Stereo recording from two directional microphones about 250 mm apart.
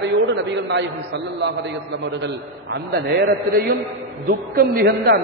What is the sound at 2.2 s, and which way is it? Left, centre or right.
A man's voice, right.